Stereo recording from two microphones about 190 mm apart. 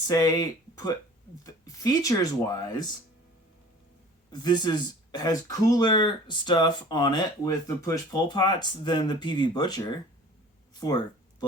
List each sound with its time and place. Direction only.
0.1 s speech: 20° left (ahead or behind)
4.3 s speech: 20° left (ahead or behind)